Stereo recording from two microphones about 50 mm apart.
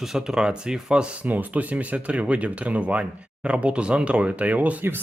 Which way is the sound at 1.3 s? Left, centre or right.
Right.